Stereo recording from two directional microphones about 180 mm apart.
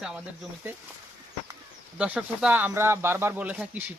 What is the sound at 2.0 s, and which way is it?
Speech, 5° right (ahead or behind).